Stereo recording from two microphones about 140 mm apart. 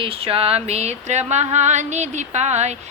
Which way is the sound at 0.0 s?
45° right (ahead or behind).